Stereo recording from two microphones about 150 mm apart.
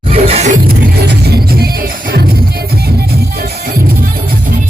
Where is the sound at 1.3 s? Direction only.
90° right.